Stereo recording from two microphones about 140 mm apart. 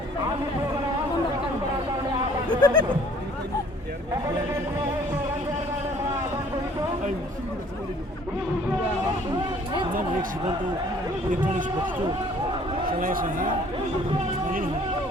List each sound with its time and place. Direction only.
2.5 s speech: 30° left (ahead or behind)
13.0 s a man's voice: 80° right